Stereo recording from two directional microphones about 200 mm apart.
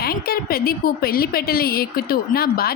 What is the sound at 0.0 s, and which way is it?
A woman's voice, 50° left (ahead or behind).